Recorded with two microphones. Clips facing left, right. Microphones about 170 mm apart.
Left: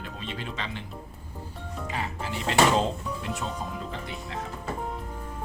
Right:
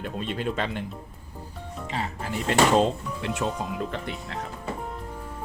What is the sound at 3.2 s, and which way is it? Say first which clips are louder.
Speech: right 7 dB; 90° right.